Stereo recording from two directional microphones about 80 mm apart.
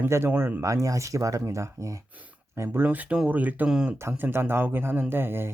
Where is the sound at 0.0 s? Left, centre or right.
Right.